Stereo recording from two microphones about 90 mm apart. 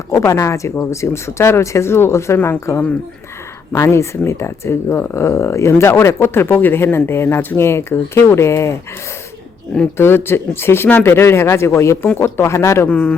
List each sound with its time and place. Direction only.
0.1 s speech: 30° left (ahead or behind)
10.0 s speech: 25° left (ahead or behind)
12.9 s speech: 15° left (ahead or behind)